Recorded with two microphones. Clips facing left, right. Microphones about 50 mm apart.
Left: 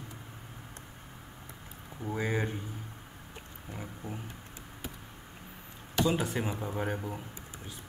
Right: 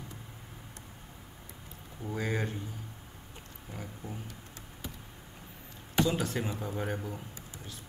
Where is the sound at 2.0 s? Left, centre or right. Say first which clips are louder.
Left 1 dB; centre.